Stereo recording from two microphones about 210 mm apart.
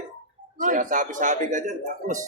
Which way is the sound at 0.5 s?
40° right (ahead or behind).